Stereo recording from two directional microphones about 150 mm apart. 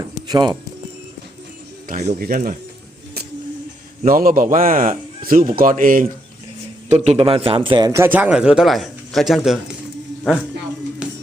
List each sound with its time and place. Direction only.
0.3 s speech: 30° right (ahead or behind)
1.9 s a man's voice: 75° right (ahead or behind)
4.0 s a man's voice: 70° right (ahead or behind)
6.8 s a man's voice: 45° right (ahead or behind)
7.9 s speech: 15° right (ahead or behind); by 9.6 s centre (ahead or behind)
11.0 s music: 5° right (ahead or behind)